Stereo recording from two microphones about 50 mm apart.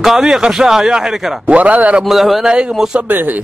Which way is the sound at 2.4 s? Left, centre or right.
Centre.